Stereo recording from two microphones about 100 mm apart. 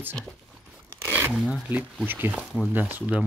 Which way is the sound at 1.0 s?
20° right (ahead or behind).